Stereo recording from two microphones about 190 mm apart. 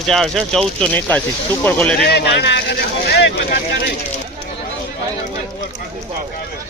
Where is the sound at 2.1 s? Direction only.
65° left (ahead or behind).